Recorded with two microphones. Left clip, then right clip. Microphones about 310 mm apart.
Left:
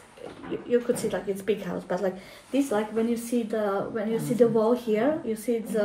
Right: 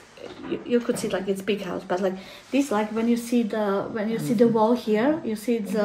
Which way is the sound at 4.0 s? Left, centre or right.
Right.